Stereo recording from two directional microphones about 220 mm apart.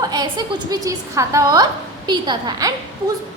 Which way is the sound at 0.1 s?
20° right (ahead or behind).